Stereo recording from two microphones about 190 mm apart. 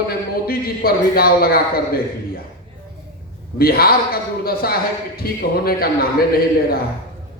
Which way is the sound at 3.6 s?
55° left (ahead or behind).